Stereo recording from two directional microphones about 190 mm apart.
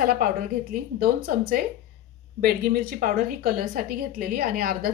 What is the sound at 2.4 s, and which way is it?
A woman's voice, 50° right (ahead or behind).